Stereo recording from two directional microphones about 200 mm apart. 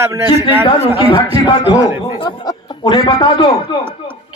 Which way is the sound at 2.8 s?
20° left (ahead or behind).